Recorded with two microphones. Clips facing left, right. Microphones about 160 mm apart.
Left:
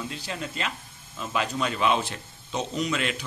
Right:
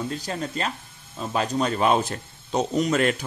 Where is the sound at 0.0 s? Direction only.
45° right (ahead or behind).